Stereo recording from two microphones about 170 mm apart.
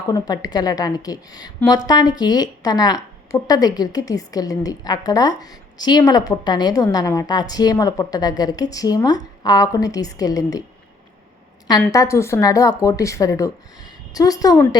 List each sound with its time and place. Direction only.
0.1 s a woman's voice: 25° left (ahead or behind)
11.8 s a woman's voice: 20° left (ahead or behind)